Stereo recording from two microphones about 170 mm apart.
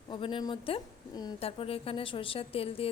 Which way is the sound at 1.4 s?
35° left (ahead or behind).